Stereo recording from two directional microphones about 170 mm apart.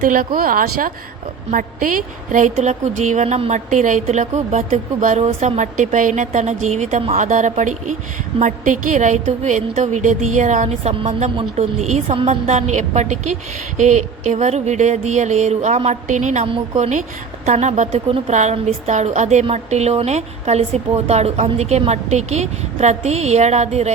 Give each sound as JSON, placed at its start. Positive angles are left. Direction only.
{"t": 0.0, "sound": "a woman's voice", "side_deg": -55}